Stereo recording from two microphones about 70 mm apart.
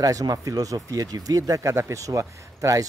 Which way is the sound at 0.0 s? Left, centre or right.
Right.